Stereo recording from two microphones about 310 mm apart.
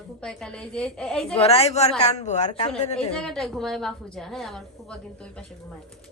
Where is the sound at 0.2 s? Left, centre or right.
Centre.